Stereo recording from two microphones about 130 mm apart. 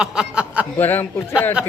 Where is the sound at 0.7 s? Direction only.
15° left (ahead or behind).